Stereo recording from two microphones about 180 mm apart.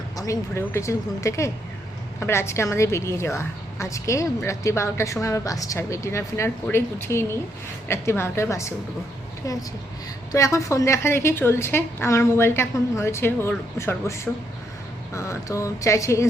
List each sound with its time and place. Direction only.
0.2 s a woman's voice: 15° left (ahead or behind)